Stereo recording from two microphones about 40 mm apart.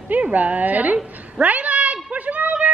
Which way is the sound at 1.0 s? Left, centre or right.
Right.